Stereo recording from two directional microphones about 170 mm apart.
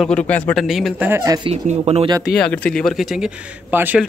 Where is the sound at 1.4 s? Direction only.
40° right (ahead or behind).